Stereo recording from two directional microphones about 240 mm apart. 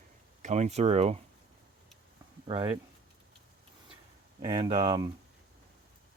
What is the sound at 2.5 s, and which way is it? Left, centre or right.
Speech, right.